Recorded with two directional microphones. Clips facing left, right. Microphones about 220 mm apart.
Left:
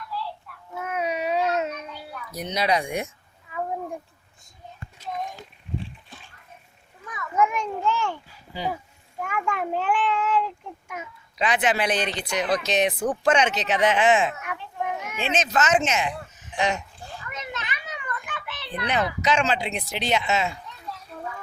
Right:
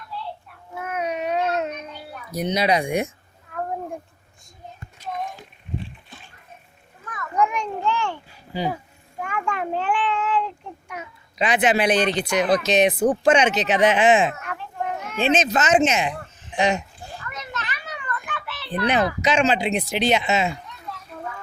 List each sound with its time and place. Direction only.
0.7 s a sound: centre (ahead or behind)
2.4 s speech: 15° right (ahead or behind)
3.5 s a sound: 5° left (ahead or behind)
7.1 s children playing: 5° left (ahead or behind)
9.2 s a sound: 5° left (ahead or behind)
11.3 s speech: 20° right (ahead or behind)
14.4 s children playing: 5° left (ahead or behind)
15.2 s speech: 20° right (ahead or behind)
17.2 s children playing: 15° left (ahead or behind)
19.2 s speech: 20° right (ahead or behind)